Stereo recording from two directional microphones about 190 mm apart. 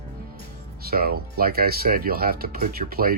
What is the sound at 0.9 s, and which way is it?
Speech, 55° right (ahead or behind).